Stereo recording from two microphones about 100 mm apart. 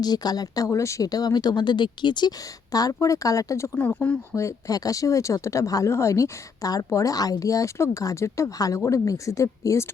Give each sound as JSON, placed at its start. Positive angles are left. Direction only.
{"t": 0.0, "sound": "speech", "side_deg": 45}
{"t": 2.7, "sound": "speech", "side_deg": 35}
{"t": 3.8, "sound": "speech", "side_deg": 15}
{"t": 4.4, "sound": "speech", "side_deg": 30}